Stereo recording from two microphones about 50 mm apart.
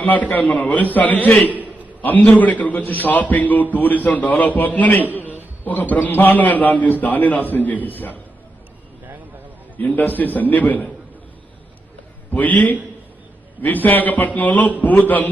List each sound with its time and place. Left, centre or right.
0.0 s a man's voice: left
9.8 s a man's voice: left
12.3 s a man's voice: left